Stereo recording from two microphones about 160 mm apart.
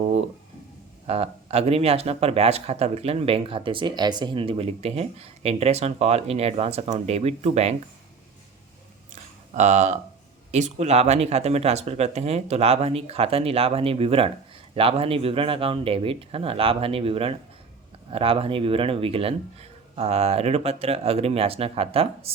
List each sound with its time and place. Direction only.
1.0 s speech: 40° right (ahead or behind)
9.6 s speech: 45° right (ahead or behind)